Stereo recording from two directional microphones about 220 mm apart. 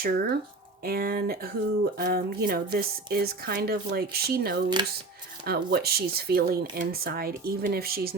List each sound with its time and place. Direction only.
0.0 s speech: 45° right (ahead or behind)